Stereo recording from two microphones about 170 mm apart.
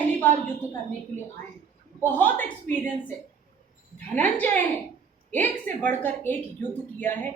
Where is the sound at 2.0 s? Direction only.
10° left (ahead or behind).